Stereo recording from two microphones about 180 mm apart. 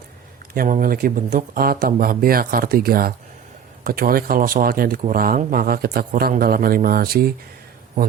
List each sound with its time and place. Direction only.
0.5 s speech: 50° right (ahead or behind)